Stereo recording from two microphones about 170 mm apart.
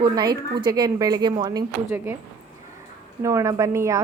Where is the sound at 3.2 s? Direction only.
15° right (ahead or behind).